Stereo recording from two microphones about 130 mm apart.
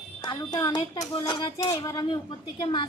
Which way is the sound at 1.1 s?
40° left (ahead or behind).